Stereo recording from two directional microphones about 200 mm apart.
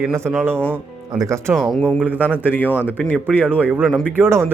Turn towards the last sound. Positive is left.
turn(degrees=-10)  # may be behind; listen again after turning